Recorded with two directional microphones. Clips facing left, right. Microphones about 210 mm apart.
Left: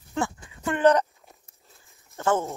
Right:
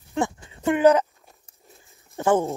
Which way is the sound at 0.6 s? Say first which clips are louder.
Right 3 dB; 15° right (ahead or behind).